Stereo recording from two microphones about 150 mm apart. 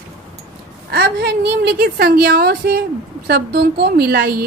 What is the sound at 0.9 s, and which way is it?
A woman's voice, 90° right.